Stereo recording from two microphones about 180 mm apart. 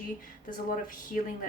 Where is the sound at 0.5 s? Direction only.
50° left (ahead or behind).